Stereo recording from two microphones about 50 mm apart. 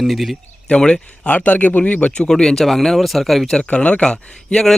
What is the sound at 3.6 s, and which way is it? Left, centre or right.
Speech, left.